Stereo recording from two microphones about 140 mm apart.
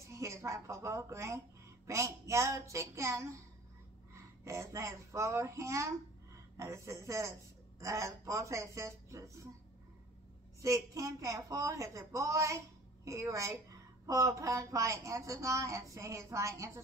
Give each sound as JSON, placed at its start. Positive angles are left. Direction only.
{"t": 0.1, "sound": "a woman's voice", "side_deg": -20}
{"t": 10.6, "sound": "a woman's voice", "side_deg": -25}